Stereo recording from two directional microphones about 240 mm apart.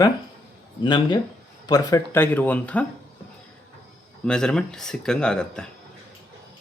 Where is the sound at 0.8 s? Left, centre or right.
Centre.